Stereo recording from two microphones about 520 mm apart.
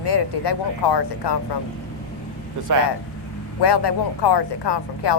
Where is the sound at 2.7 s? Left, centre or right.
Right.